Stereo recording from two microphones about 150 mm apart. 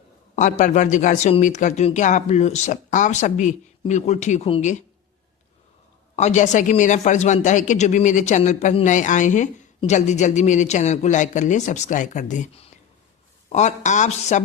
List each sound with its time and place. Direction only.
0.3 s speech: 55° left (ahead or behind)
6.1 s speech: 50° left (ahead or behind)